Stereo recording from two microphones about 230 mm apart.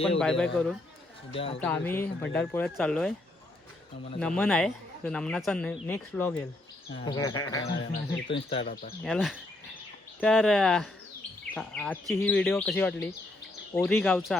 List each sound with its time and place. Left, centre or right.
0.2 s speech: centre
4.2 s speech: centre
6.9 s speech: centre
9.0 s speech: centre